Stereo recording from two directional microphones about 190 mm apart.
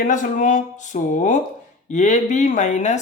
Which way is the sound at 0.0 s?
45° left (ahead or behind).